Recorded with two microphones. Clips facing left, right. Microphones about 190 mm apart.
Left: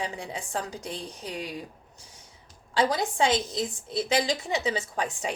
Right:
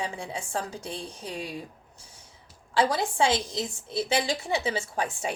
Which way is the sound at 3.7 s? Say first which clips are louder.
Even; 15° left (ahead or behind).